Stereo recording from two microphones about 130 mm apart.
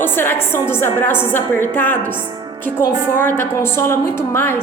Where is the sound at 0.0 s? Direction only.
15° left (ahead or behind).